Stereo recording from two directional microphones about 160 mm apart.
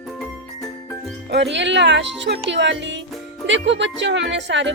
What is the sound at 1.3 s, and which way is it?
Speech, 90° right.